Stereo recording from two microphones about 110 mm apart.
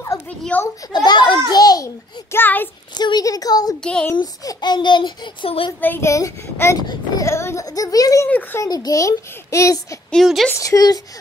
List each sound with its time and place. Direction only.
0.5 s a child's voice: 15° left (ahead or behind)
0.9 s a child's voice: 45° left (ahead or behind)
1.5 s a woman's voice: 35° left (ahead or behind)
2.3 s a child's voice: 20° left (ahead or behind)
2.9 s a woman's voice: 40° left (ahead or behind)
3.8 s a child's voice: 10° left (ahead or behind)
4.2 s a child's voice: 35° left (ahead or behind)
5.8 s a child's voice: 20° left (ahead or behind)
6.8 s a woman's voice: 40° left (ahead or behind)
7.2 s a child's voice: 25° left (ahead or behind)
8.3 s a child's voice: 15° left (ahead or behind)
8.6 s a child's voice: 35° left (ahead or behind)
10.1 s speech: centre (ahead or behind)
10.5 s a woman's voice: 30° left (ahead or behind)